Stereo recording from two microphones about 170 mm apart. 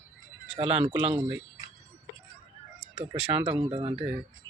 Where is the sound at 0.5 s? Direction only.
35° right (ahead or behind).